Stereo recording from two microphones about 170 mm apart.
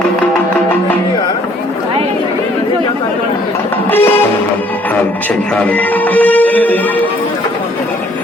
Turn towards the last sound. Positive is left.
turn(degrees=10)  # may be behind; listen again after turning